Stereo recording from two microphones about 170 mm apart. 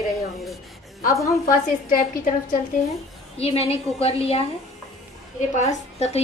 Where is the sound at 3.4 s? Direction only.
35° left (ahead or behind).